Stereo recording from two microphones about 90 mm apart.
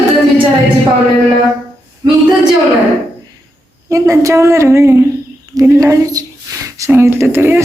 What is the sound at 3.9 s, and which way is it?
A woman's voice, 35° right (ahead or behind).